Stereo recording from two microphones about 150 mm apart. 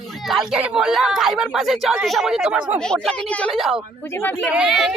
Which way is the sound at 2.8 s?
5° left (ahead or behind).